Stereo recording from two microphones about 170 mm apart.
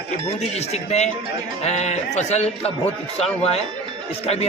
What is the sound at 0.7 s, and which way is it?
A man's voice, 40° left (ahead or behind).